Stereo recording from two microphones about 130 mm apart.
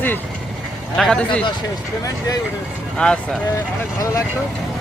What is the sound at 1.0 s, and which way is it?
Speech, 5° left (ahead or behind).